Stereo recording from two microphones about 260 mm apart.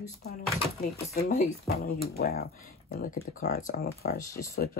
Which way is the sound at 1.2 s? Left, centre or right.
Left.